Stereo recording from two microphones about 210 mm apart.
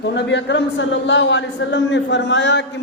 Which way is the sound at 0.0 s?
55° left (ahead or behind).